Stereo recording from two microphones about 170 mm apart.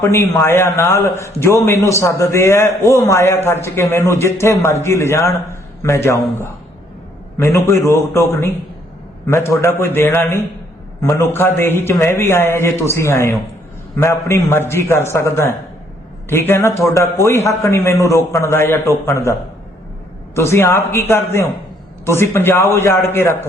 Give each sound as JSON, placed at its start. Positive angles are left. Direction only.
{"t": 0.0, "sound": "a man's voice", "side_deg": 15}